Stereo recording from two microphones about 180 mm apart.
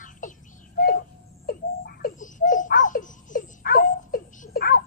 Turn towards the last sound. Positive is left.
turn(degrees=55)  # may be behind; listen again after turning